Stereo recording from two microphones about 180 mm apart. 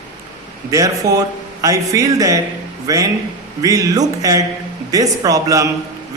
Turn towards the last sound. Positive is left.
turn(degrees=-20)  # may be behind; listen again after turning